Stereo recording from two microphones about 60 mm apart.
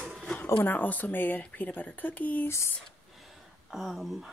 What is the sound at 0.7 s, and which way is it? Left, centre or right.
Speech, left.